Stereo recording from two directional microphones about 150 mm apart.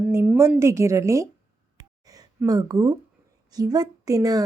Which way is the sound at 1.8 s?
25° right (ahead or behind).